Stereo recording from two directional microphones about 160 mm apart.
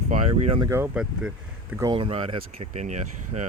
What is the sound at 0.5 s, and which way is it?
Speech, 20° right (ahead or behind).